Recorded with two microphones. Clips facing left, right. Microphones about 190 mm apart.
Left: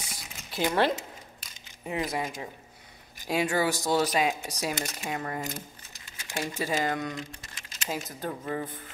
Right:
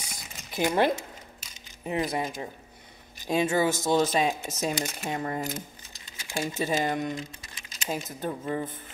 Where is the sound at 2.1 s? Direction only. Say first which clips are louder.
Right 2 dB; 30° right (ahead or behind).